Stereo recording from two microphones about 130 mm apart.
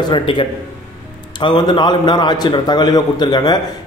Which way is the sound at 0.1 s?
40° left (ahead or behind).